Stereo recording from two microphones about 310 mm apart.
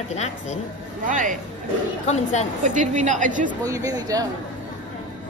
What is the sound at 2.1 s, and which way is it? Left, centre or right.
Speech, left.